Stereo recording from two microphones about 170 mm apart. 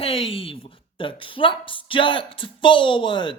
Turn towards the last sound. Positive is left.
turn(degrees=30)  # may be behind; listen again after turning